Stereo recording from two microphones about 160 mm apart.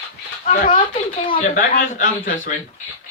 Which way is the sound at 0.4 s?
55° left (ahead or behind).